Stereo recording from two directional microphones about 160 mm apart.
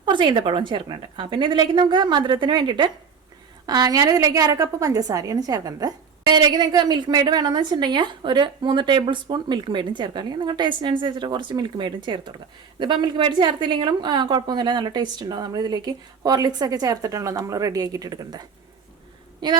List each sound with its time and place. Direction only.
0.0 s a woman's voice: 30° right (ahead or behind)